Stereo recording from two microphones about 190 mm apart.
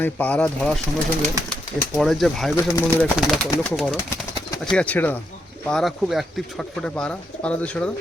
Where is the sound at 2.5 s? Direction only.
15° left (ahead or behind).